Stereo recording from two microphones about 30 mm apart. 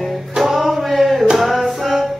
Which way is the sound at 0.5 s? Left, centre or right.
Centre.